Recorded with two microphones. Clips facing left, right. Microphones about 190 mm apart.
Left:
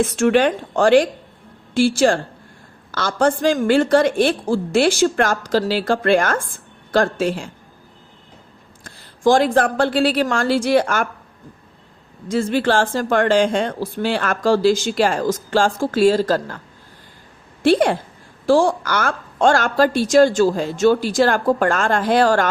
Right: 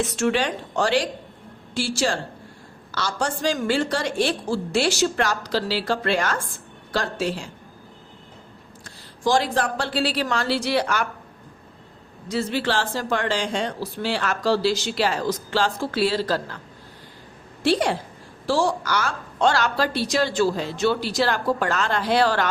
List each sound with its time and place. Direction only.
0.0 s speech: 55° left (ahead or behind)
8.8 s a woman's voice: 55° left (ahead or behind)
12.3 s speech: 50° left (ahead or behind)
17.6 s a woman's voice: 55° left (ahead or behind)